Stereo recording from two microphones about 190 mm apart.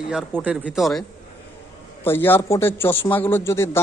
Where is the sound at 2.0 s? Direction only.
10° left (ahead or behind).